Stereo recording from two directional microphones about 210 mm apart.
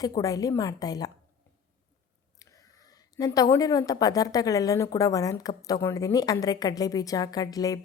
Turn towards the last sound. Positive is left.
turn(degrees=15)  # may be behind; listen again after turning